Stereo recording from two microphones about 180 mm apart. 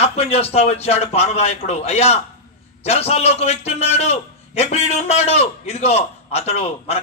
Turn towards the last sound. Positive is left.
turn(degrees=35)  # may be behind; listen again after turning